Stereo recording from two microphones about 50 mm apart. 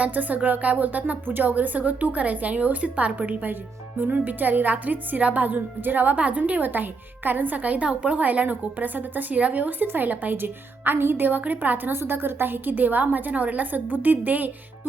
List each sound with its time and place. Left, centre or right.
0.0 s a woman's voice: right
11.9 s a woman's voice: right